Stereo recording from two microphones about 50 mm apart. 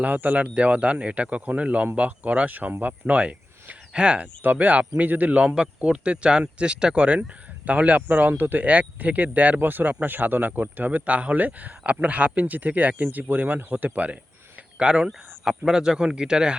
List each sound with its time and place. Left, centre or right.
0.0 s speech: right
4.4 s speech: right
14.8 s speech: centre